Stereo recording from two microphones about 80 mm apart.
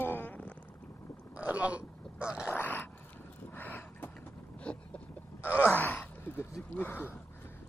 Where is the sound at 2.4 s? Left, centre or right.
Left.